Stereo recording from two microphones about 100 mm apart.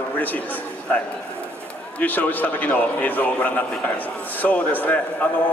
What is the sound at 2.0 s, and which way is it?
A man's voice, 15° left (ahead or behind).